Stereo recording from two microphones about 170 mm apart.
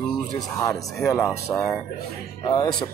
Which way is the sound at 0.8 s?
Centre (ahead or behind).